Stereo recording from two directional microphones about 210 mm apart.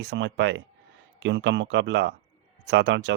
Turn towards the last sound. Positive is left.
turn(degrees=-55)  # may be behind; listen again after turning